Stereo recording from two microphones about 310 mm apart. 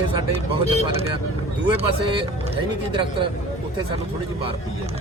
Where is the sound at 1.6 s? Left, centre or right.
Centre.